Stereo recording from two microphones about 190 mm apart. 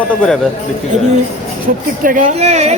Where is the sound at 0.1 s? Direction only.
5° left (ahead or behind).